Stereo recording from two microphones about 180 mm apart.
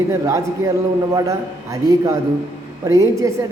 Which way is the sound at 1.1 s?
20° right (ahead or behind).